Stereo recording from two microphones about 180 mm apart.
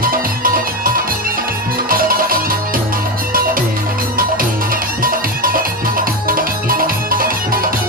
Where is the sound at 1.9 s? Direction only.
55° right (ahead or behind).